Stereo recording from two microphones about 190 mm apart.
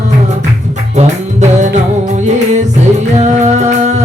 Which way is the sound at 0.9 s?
40° right (ahead or behind).